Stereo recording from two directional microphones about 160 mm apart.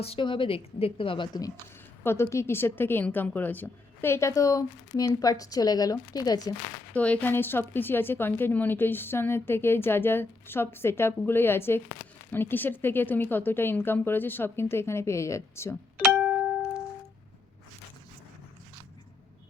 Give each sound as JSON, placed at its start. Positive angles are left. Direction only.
{"t": 0.0, "sound": "a woman's voice", "side_deg": 35}
{"t": 2.0, "sound": "a woman's voice", "side_deg": 15}
{"t": 6.9, "sound": "a woman's voice", "side_deg": 10}
{"t": 16.1, "sound": "music", "side_deg": -5}